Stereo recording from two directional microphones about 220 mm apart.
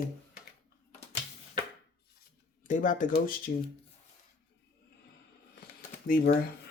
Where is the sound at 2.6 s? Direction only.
35° left (ahead or behind).